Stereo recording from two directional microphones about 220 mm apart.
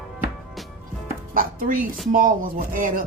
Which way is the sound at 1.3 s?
40° right (ahead or behind).